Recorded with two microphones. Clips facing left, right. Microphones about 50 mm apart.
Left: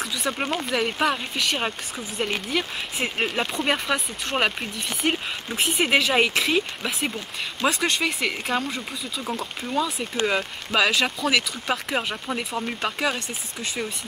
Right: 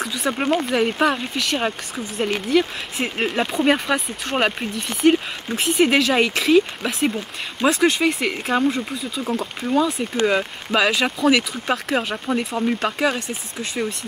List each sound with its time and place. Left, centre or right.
0.0 s speech: centre
7.6 s speech: centre